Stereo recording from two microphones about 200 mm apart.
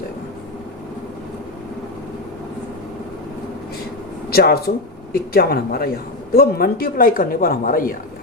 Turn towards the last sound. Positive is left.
turn(degrees=45)  # may be behind; listen again after turning